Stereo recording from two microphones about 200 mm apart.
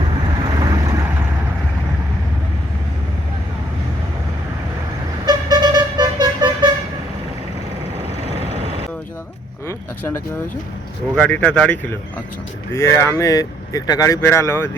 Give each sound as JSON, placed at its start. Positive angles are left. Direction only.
{"t": 0.6, "sound": "vehicle", "side_deg": -20}
{"t": 5.2, "sound": "vehicle", "side_deg": -20}
{"t": 9.6, "sound": "a sound", "side_deg": 15}
{"t": 11.1, "sound": "speech", "side_deg": 5}